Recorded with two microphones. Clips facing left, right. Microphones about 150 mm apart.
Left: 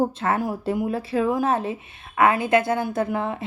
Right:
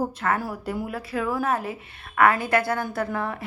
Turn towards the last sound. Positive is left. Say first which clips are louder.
# left 3 dB
turn(degrees=20)  # may be behind; listen again after turning